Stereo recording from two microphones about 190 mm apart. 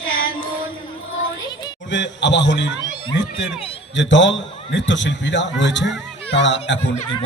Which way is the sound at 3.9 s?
70° left (ahead or behind).